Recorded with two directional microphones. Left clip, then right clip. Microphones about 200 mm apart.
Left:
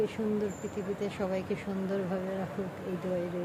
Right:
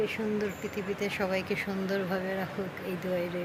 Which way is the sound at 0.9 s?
5° left (ahead or behind).